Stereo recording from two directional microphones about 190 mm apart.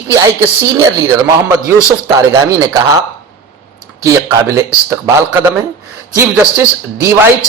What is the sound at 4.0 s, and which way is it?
Speech, 15° right (ahead or behind).